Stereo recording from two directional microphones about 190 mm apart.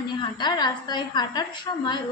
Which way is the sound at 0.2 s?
25° left (ahead or behind).